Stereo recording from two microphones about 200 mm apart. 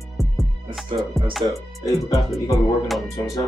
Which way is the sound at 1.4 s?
20° right (ahead or behind).